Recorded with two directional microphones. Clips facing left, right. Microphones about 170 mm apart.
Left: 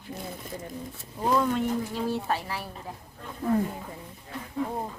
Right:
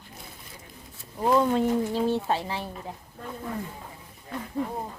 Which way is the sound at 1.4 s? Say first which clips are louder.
Right 3 dB; 30° right (ahead or behind).